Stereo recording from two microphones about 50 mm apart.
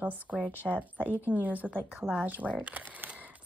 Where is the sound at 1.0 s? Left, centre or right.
Right.